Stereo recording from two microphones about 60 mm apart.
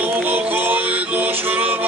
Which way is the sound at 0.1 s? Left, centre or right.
Right.